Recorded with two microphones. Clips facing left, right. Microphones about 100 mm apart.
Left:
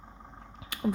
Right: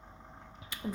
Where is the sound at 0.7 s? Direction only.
70° left (ahead or behind).